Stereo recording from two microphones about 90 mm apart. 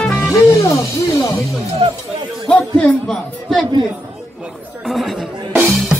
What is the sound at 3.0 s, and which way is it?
Speech, 5° left (ahead or behind).